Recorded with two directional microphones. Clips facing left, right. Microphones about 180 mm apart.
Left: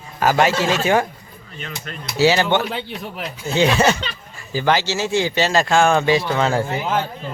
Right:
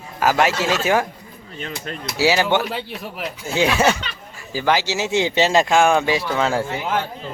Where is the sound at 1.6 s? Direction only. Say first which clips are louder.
Right 3 dB; 35° right (ahead or behind).